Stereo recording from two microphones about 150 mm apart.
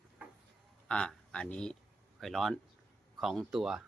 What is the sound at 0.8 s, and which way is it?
Speech, 5° left (ahead or behind).